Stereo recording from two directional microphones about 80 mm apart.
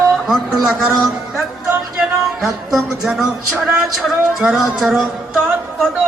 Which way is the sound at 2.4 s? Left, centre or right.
Centre.